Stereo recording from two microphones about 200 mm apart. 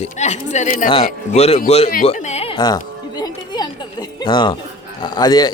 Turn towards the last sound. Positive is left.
turn(degrees=20)  # may be behind; listen again after turning